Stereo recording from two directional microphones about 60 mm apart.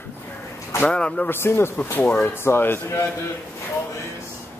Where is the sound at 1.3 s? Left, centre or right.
Left.